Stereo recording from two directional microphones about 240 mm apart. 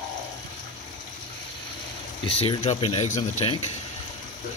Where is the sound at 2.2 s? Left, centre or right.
Left.